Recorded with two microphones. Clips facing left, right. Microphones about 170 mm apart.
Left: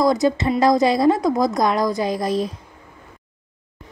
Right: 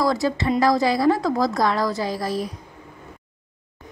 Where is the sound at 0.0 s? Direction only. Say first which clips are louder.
Left 4 dB; 20° left (ahead or behind).